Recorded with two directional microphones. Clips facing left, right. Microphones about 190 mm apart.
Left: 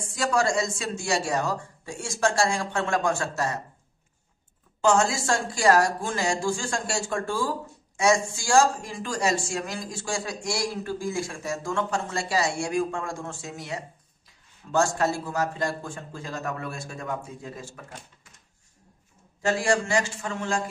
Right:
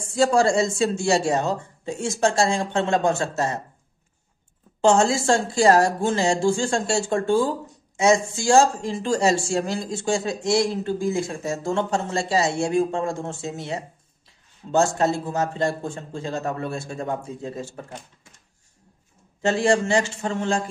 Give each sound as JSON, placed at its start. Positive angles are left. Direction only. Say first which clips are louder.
{"t": 0.0, "sound": "speech", "louder": "right 6 dB", "side_deg": -30}
{"t": 4.8, "sound": "speech", "louder": "right 4 dB", "side_deg": -25}
{"t": 19.4, "sound": "speech", "louder": "right 4 dB", "side_deg": -25}